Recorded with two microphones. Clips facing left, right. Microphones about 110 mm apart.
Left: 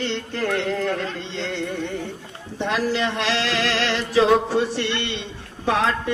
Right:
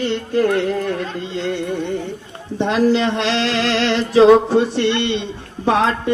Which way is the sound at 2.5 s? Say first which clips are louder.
Right 7 dB; 25° right (ahead or behind).